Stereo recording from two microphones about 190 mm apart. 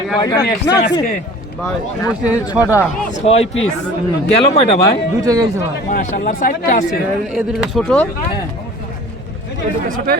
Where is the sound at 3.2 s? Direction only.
30° left (ahead or behind).